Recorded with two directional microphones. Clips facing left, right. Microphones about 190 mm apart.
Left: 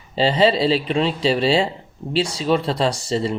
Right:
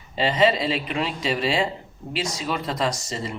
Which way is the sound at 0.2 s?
30° left (ahead or behind).